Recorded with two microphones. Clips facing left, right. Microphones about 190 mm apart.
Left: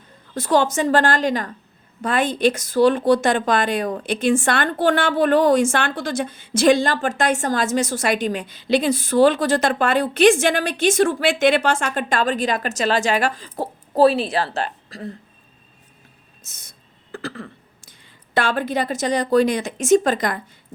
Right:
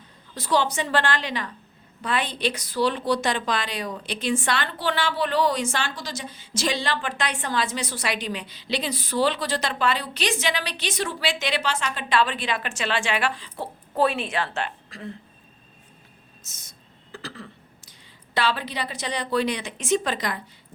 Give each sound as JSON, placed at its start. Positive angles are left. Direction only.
{"t": 0.3, "sound": "a woman's voice", "side_deg": 50}
{"t": 16.4, "sound": "a sound", "side_deg": 55}
{"t": 18.3, "sound": "a woman's voice", "side_deg": 50}